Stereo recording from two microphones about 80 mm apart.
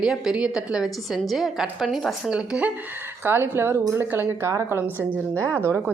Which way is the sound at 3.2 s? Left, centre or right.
Right.